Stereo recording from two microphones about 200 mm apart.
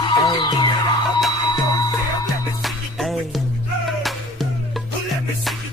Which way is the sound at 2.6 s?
Centre (ahead or behind).